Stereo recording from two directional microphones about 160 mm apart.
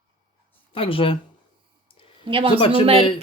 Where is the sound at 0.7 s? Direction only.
35° left (ahead or behind).